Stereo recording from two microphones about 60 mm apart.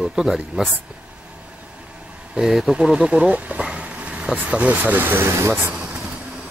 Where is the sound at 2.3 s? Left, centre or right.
Centre; by 5.2 s right.